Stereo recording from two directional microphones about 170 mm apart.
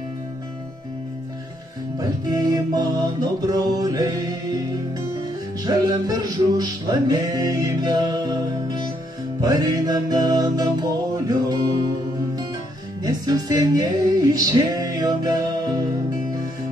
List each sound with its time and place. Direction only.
2.0 s music: 25° right (ahead or behind)
5.6 s music: 25° right (ahead or behind)
13.0 s music: 25° right (ahead or behind)